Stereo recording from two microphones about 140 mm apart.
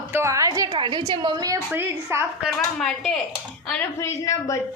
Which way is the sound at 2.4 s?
Centre (ahead or behind).